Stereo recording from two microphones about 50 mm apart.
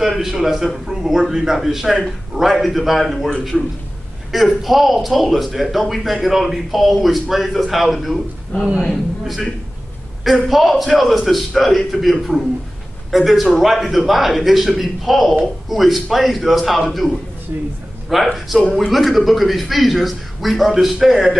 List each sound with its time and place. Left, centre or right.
0.0 s a man's voice: centre
17.5 s a man's voice: right
18.1 s speech: centre